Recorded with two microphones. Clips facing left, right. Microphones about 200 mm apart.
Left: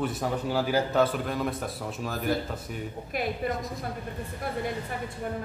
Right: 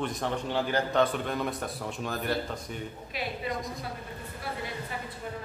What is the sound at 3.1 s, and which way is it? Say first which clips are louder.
Speech: left 5 dB; 50° left (ahead or behind).